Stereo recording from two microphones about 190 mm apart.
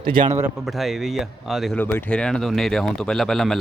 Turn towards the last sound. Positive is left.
turn(degrees=0)  # may be behind; listen again after turning